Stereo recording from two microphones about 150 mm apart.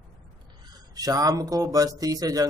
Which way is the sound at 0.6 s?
25° right (ahead or behind).